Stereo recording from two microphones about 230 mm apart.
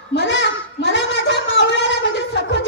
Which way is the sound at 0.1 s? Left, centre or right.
Left.